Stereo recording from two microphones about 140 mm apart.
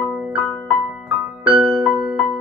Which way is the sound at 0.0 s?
10° right (ahead or behind).